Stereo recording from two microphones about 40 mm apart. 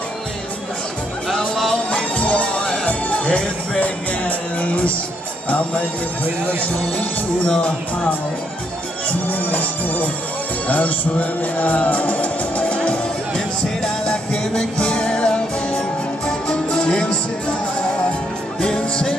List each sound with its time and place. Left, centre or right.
1.5 s music: centre
1.9 s music: left
3.3 s speech: left
3.8 s music: left
7.4 s speech: left
9.3 s music: left
12.7 s music: left